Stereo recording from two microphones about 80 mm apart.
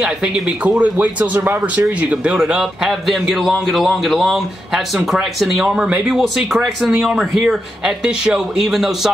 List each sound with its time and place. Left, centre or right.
0.0 s a man's voice: centre